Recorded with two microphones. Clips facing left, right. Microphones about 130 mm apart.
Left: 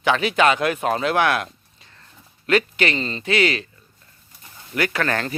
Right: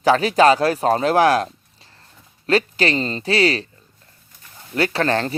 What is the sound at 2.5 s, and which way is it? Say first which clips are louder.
A man's voice: right 1 dB; 30° right (ahead or behind).